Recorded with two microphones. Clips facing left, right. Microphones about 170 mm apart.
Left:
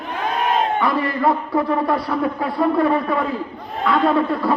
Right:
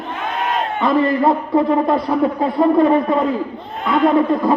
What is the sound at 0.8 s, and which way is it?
A man's voice, 20° right (ahead or behind).